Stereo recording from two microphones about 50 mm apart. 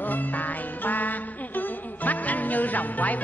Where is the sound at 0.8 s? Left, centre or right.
Left.